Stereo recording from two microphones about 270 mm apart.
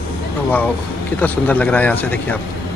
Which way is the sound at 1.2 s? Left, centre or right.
Centre.